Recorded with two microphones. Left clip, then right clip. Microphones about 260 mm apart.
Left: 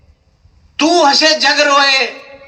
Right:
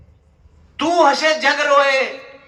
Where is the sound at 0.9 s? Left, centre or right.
Left.